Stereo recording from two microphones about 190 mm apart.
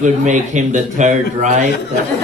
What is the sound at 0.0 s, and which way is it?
A man's voice, 40° right (ahead or behind).